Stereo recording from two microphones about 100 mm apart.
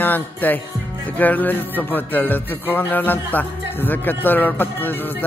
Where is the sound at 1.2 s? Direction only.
15° left (ahead or behind).